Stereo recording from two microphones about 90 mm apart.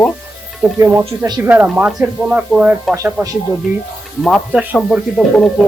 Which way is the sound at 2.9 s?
35° right (ahead or behind).